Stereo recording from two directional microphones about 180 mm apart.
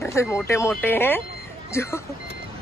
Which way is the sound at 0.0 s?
15° left (ahead or behind).